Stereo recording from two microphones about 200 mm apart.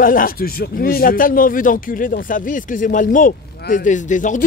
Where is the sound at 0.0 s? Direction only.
45° left (ahead or behind).